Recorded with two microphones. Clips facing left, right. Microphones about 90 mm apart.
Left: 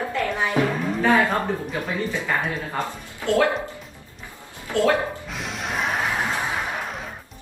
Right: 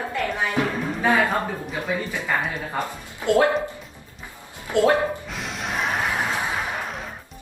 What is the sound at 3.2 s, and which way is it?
Speech, 20° right (ahead or behind).